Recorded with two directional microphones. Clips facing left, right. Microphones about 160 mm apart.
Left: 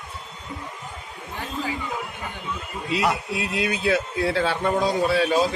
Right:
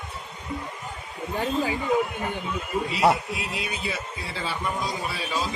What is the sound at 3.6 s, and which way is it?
A man's voice, 90° left.